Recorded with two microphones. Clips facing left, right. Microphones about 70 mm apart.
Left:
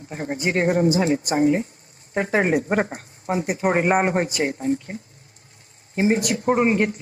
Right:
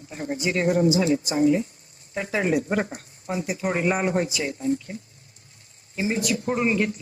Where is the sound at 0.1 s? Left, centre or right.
Left.